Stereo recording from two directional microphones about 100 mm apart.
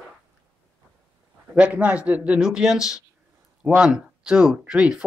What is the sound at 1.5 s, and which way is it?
Speech, 15° right (ahead or behind).